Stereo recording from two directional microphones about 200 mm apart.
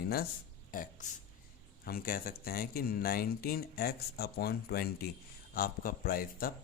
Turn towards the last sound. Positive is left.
turn(degrees=45)  # may be behind; listen again after turning